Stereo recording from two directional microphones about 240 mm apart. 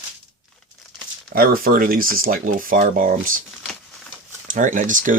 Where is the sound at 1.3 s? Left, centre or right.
Right.